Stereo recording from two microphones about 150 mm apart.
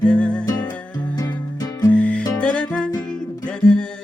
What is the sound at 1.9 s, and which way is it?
Music, 10° left (ahead or behind).